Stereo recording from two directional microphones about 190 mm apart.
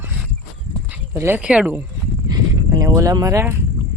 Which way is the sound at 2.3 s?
20° right (ahead or behind).